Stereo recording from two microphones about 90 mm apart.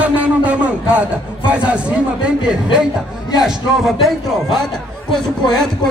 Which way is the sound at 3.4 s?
Centre (ahead or behind).